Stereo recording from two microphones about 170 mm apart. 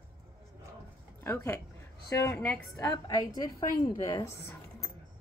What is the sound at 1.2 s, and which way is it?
A woman's voice, 15° left (ahead or behind).